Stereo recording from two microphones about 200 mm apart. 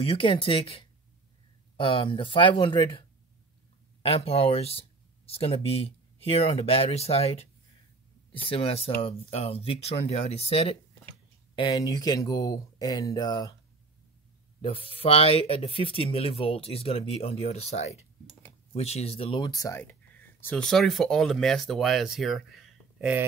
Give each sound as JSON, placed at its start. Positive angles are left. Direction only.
{"t": 0.0, "sound": "speech", "side_deg": 30}
{"t": 8.5, "sound": "speech", "side_deg": 30}
{"t": 14.6, "sound": "speech", "side_deg": 25}